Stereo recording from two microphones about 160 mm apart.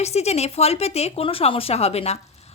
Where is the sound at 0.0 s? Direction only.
40° left (ahead or behind).